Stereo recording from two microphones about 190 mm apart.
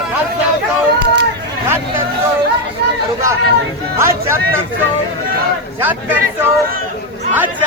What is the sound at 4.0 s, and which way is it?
Speech, 15° right (ahead or behind).